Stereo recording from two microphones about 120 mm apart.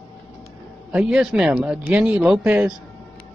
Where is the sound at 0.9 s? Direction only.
5° right (ahead or behind).